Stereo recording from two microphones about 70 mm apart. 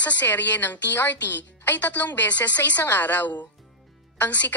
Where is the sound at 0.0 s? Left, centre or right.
Left.